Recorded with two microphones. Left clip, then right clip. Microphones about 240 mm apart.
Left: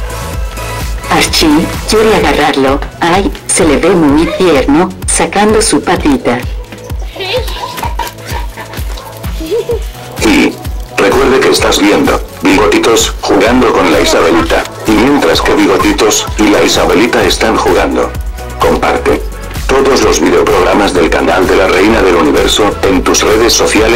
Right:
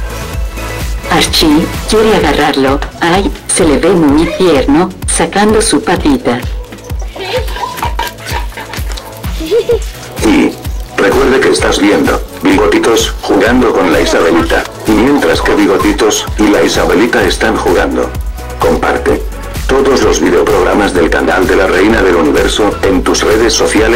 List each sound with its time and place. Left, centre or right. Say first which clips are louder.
1.0 s music: even; centre
1.4 s speech: even; left
2.1 s a woman's voice: left 1 dB; centre
4.0 s speech: even; left
4.7 s speech: left 1 dB; centre
5.5 s speech: left 1 dB; left
7.2 s music: left 1 dB; centre
11.0 s speech: left 1 dB; left